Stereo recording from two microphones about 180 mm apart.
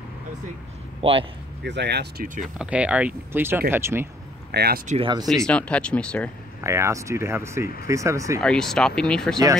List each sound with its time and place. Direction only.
1.0 s speech: 30° right (ahead or behind)
1.6 s speech: 70° right (ahead or behind)
2.2 s speech: 45° right (ahead or behind)
2.6 s speech: 5° right (ahead or behind)
4.5 s speech: 60° right (ahead or behind)
4.8 s speech: 35° right (ahead or behind)
5.2 s speech: centre (ahead or behind)
6.6 s speech: 15° right (ahead or behind)
8.4 s speech: 5° left (ahead or behind)